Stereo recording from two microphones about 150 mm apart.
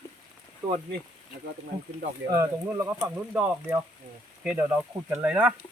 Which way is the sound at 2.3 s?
20° right (ahead or behind).